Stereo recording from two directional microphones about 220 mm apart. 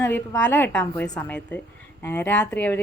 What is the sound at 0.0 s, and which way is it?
Speech, 10° left (ahead or behind).